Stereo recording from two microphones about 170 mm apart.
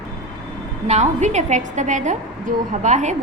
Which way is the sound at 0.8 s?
40° right (ahead or behind).